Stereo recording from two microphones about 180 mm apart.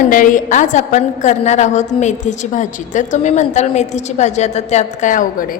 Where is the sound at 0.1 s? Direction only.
45° left (ahead or behind).